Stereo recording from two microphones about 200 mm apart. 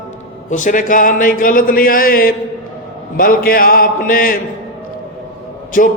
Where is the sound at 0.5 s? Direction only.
40° left (ahead or behind).